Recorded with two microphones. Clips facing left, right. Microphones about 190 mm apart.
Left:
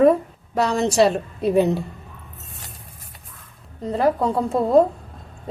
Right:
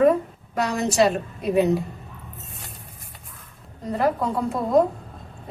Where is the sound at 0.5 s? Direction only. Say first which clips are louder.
Left 3 dB; 30° left (ahead or behind).